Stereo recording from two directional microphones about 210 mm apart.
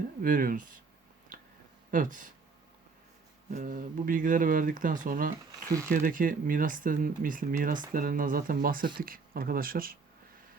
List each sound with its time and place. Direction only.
0.2 s speech: 40° right (ahead or behind)
1.9 s speech: 40° right (ahead or behind)
3.5 s speech: 40° right (ahead or behind)